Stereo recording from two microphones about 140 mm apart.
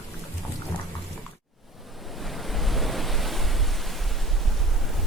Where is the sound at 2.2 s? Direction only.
Centre (ahead or behind).